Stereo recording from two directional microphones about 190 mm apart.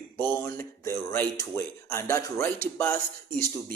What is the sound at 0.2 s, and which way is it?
A man's voice, 10° left (ahead or behind).